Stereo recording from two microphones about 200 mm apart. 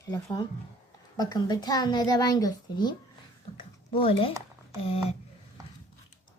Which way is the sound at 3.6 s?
25° left (ahead or behind).